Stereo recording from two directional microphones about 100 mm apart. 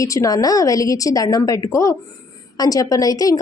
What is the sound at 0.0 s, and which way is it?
A woman's voice, 35° left (ahead or behind).